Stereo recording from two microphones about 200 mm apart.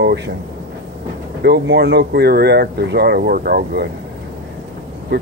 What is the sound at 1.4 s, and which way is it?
Speech, 55° right (ahead or behind).